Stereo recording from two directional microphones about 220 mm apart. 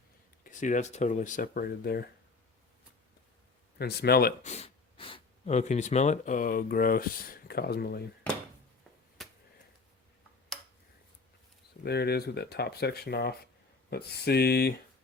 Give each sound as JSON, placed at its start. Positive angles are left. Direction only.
{"t": 0.4, "sound": "speech", "side_deg": 35}
{"t": 3.8, "sound": "speech", "side_deg": 45}
{"t": 4.4, "sound": "speech", "side_deg": 30}
{"t": 9.2, "sound": "a sound", "side_deg": 0}
{"t": 11.9, "sound": "speech", "side_deg": 45}